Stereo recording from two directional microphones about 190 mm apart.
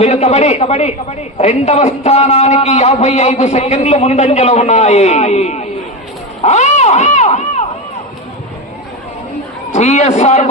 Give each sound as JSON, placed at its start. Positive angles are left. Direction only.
{"t": 0.0, "sound": "a man's voice", "side_deg": 35}
{"t": 9.7, "sound": "a man's voice", "side_deg": 35}